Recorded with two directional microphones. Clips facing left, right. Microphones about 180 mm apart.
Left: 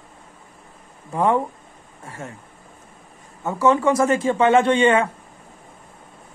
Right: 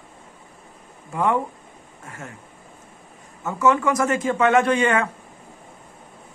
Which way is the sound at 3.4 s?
30° left (ahead or behind).